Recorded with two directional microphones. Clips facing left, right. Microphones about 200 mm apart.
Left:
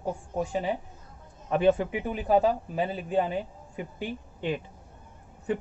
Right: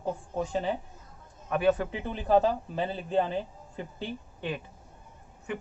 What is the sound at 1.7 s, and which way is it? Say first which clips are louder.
Speech: left 3 dB; 10° left (ahead or behind).